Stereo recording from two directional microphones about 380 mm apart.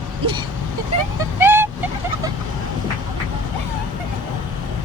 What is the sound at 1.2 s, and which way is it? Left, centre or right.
Speech, centre.